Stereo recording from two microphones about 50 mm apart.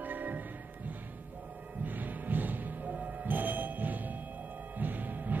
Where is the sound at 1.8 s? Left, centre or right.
Right.